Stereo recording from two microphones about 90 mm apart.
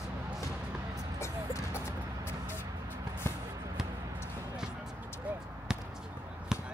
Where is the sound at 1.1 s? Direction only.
30° left (ahead or behind).